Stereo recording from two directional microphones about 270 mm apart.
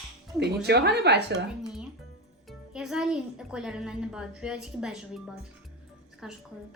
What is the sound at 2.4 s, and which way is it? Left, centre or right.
Speech, centre.